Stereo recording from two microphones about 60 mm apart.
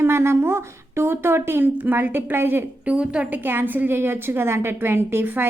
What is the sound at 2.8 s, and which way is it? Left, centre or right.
A woman's voice, centre.